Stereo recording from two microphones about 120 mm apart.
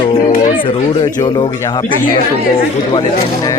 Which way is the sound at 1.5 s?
25° left (ahead or behind).